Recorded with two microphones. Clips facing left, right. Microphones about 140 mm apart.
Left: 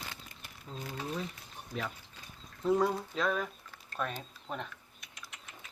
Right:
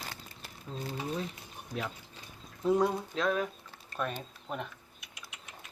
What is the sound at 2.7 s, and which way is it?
Speech, centre (ahead or behind).